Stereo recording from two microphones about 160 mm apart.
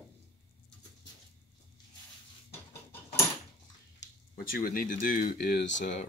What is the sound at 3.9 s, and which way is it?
Speech, 65° left (ahead or behind).